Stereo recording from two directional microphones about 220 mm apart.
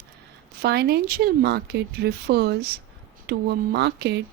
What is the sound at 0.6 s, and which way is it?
Speech, 45° right (ahead or behind).